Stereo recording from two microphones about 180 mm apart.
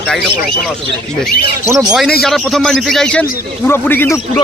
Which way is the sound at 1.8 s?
Centre (ahead or behind).